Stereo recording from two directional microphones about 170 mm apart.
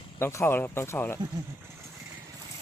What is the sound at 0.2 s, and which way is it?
Speech, 15° left (ahead or behind).